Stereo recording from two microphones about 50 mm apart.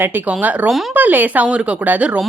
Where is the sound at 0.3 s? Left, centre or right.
Right.